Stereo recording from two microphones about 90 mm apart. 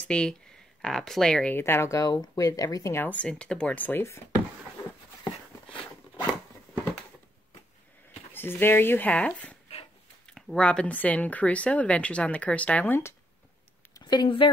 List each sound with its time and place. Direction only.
0.1 s speech: 10° left (ahead or behind)
1.5 s speech: 25° left (ahead or behind)
3.0 s speech: 15° left (ahead or behind)
5.2 s a sound: 60° left (ahead or behind)
8.3 s speech: 25° left (ahead or behind)
13.9 s a sound: 50° left (ahead or behind)